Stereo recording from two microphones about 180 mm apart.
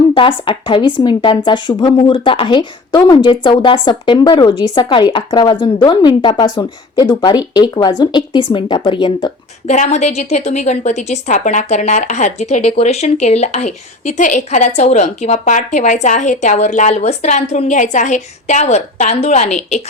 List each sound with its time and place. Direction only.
0.1 s speech: 30° left (ahead or behind)
9.6 s a woman's voice: 40° left (ahead or behind)